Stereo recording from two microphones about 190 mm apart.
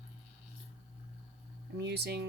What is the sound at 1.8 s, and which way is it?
Speech, 60° right (ahead or behind).